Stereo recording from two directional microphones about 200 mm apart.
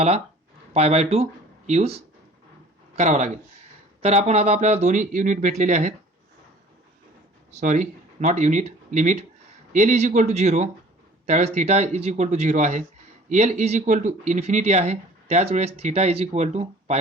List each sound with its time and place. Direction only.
0.7 s speech: 30° right (ahead or behind)
7.5 s speech: 40° right (ahead or behind)